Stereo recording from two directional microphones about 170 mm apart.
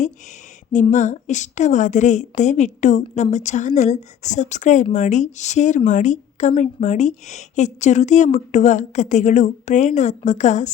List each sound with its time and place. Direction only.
0.7 s a woman's voice: 45° left (ahead or behind)